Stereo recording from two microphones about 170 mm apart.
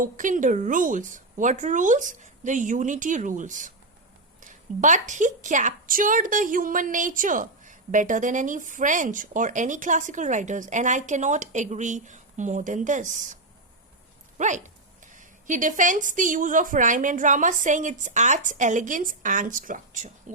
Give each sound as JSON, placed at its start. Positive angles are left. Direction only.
{"t": 0.0, "sound": "a woman's voice", "side_deg": -50}